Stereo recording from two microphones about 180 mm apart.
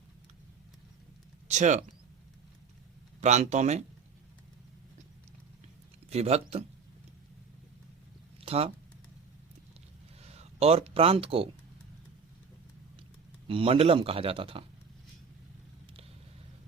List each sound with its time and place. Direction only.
1.5 s a man's voice: 40° right (ahead or behind)
3.2 s a man's voice: 40° right (ahead or behind)
6.1 s a man's voice: 35° right (ahead or behind)
8.4 s a sound: 35° right (ahead or behind)
10.3 s speech: 35° right (ahead or behind)
13.5 s a man's voice: 30° right (ahead or behind)